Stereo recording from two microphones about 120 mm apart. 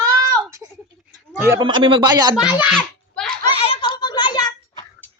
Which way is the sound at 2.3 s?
10° right (ahead or behind).